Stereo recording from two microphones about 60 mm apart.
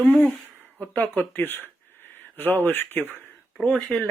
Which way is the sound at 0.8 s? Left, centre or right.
Left.